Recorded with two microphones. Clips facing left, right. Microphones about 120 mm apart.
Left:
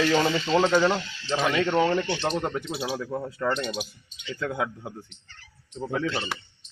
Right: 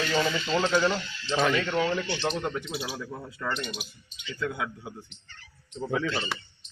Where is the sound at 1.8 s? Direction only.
50° left (ahead or behind).